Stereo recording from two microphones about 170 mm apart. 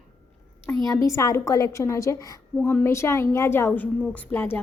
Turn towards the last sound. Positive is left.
turn(degrees=10)  # may be behind; listen again after turning